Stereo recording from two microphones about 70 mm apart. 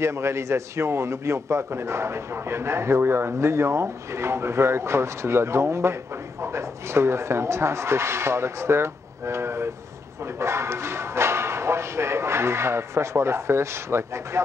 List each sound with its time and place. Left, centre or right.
0.0 s a man's voice: right